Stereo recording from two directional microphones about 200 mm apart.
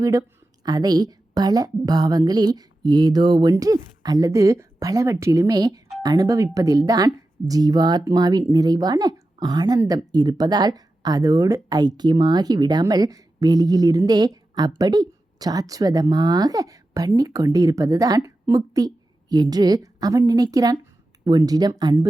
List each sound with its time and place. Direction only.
0.0 s a woman's voice: 15° right (ahead or behind)